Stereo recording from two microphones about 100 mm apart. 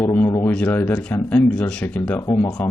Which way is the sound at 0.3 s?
30° left (ahead or behind).